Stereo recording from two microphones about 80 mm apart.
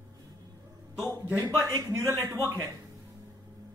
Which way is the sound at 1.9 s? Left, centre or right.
Right.